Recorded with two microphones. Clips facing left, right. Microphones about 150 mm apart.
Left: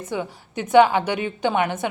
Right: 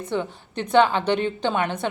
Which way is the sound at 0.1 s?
10° left (ahead or behind).